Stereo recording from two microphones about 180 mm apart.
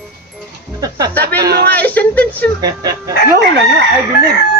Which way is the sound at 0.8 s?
20° right (ahead or behind).